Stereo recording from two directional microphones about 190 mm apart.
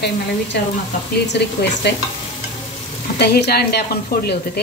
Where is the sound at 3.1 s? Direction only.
60° left (ahead or behind).